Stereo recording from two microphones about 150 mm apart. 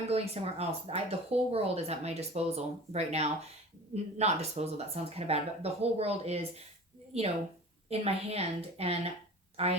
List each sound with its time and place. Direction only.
0.0 s speech: 45° right (ahead or behind)
7.9 s a woman's voice: 40° right (ahead or behind)